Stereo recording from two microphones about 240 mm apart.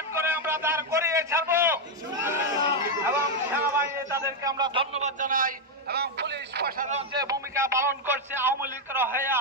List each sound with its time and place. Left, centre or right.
0.1 s a sound: centre
3.1 s chatter: centre
4.5 s speech: centre
5.2 s a man's voice: right
7.2 s a man's voice: centre